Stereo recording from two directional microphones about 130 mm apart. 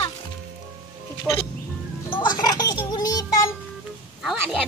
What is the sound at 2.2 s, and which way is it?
Music, 30° left (ahead or behind).